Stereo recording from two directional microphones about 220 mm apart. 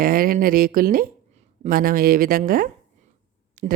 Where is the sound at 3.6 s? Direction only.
40° right (ahead or behind).